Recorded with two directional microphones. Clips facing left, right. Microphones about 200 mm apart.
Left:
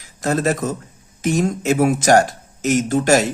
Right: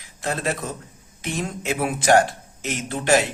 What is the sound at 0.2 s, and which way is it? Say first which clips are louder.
A man's voice: left 7 dB; 45° left (ahead or behind).